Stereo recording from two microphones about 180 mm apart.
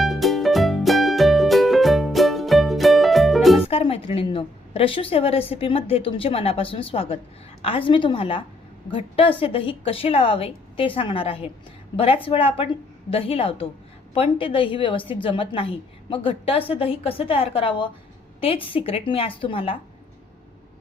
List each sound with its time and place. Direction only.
0.0 s music: centre (ahead or behind)
3.7 s a woman's voice: 35° left (ahead or behind)